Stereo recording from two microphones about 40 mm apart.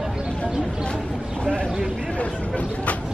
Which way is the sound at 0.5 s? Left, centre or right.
Centre.